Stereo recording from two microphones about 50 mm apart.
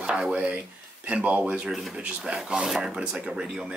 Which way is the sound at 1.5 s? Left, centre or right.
Centre.